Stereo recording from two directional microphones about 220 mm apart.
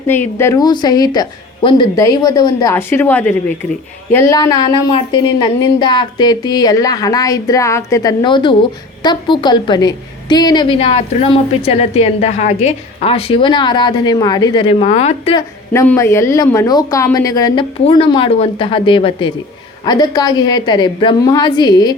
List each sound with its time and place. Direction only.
0.1 s a woman's voice: 10° left (ahead or behind)
15.7 s a woman's voice: 15° left (ahead or behind)